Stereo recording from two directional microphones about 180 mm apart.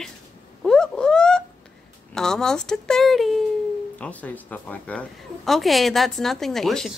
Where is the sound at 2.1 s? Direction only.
5° left (ahead or behind).